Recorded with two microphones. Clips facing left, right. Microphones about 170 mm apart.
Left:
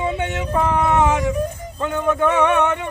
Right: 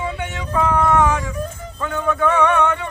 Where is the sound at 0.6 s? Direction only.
20° left (ahead or behind).